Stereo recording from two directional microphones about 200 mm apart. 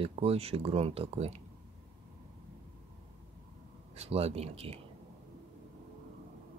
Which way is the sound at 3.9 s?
30° right (ahead or behind).